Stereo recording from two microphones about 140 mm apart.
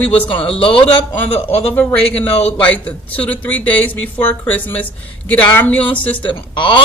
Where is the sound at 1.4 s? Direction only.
15° left (ahead or behind).